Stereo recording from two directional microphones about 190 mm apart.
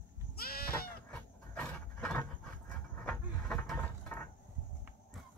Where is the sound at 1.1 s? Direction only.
5° left (ahead or behind).